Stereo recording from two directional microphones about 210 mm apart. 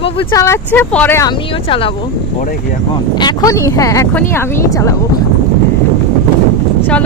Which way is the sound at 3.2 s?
20° left (ahead or behind).